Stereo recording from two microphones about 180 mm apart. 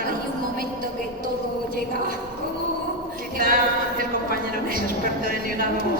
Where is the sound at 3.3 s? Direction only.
50° right (ahead or behind).